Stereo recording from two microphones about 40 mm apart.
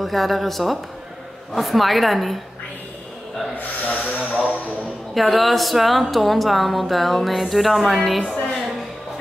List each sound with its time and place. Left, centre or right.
0.0 s a woman's voice: centre
3.5 s speech: left
4.0 s speech: right
5.1 s a woman's voice: centre